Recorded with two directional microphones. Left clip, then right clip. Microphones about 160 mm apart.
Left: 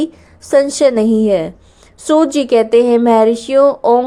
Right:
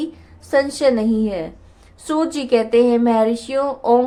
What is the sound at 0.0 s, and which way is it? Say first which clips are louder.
A woman's voice: left 7 dB; 45° left (ahead or behind).